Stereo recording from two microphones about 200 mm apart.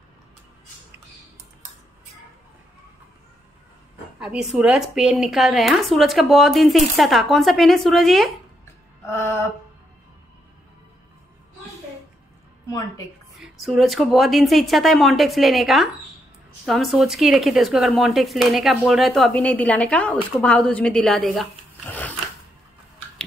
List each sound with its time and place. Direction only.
4.2 s speech: centre (ahead or behind)
9.1 s mantra: 15° left (ahead or behind)
12.6 s a woman's voice: 15° left (ahead or behind)
13.4 s speech: centre (ahead or behind)